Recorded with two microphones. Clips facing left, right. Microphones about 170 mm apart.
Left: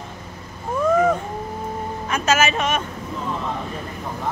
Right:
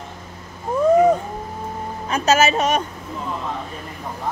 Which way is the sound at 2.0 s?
35° right (ahead or behind).